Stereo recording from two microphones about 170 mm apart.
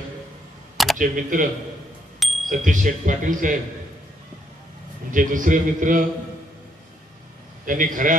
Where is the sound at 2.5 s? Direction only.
50° right (ahead or behind).